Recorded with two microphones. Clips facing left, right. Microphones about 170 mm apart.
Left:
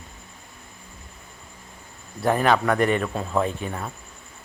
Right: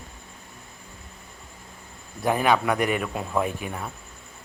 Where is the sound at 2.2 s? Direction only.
10° right (ahead or behind).